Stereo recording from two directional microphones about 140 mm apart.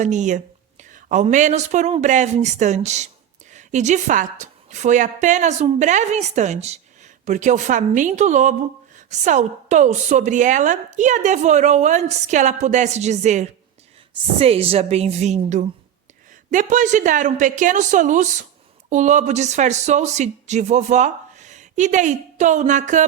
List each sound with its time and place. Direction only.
0.0 s a woman's voice: 60° right (ahead or behind)
14.3 s a woman's voice: 45° right (ahead or behind)
16.5 s a woman's voice: 65° right (ahead or behind)